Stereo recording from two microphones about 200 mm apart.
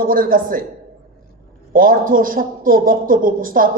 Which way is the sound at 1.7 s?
45° right (ahead or behind).